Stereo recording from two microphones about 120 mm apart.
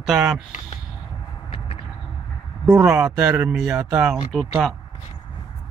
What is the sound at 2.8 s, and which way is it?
Speech, 5° right (ahead or behind).